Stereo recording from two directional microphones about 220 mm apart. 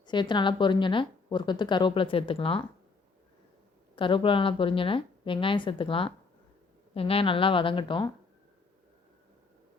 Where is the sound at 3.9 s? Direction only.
20° left (ahead or behind).